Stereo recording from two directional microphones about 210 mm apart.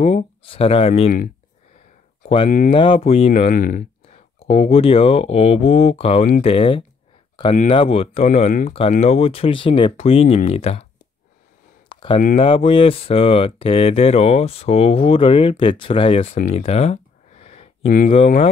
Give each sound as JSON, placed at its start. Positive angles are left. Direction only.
{"t": 0.0, "sound": "speech", "side_deg": 25}
{"t": 2.2, "sound": "speech", "side_deg": 25}
{"t": 4.4, "sound": "speech", "side_deg": 30}
{"t": 11.9, "sound": "a sound", "side_deg": 25}
{"t": 12.4, "sound": "speech", "side_deg": 25}
{"t": 16.5, "sound": "a sound", "side_deg": 30}
{"t": 18.1, "sound": "speech", "side_deg": 30}